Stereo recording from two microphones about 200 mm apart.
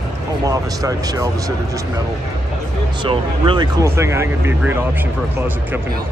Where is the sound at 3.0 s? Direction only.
25° right (ahead or behind).